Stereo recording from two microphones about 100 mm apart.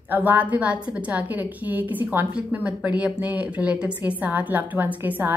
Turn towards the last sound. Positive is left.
turn(degrees=-20)  # may be behind; listen again after turning